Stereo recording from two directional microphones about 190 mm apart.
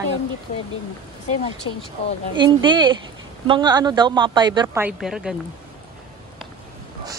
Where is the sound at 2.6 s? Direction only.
25° right (ahead or behind).